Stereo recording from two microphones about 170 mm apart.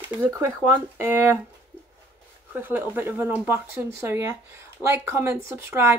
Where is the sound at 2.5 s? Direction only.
10° right (ahead or behind).